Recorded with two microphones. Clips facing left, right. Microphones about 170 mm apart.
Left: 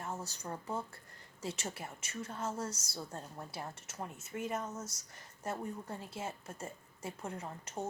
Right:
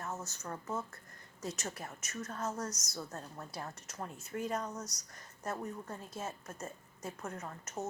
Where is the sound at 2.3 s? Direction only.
25° left (ahead or behind).